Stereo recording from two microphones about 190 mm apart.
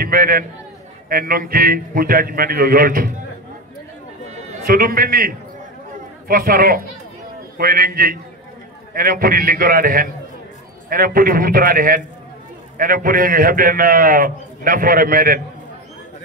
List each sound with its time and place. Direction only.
0.0 s a man's voice: 50° right (ahead or behind)
4.6 s a man's voice: 50° right (ahead or behind)